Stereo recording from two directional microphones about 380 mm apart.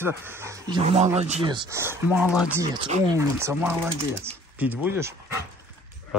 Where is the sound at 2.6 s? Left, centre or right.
Centre.